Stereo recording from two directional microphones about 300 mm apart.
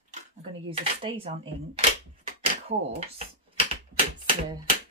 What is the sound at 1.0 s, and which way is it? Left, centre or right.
Speech, centre.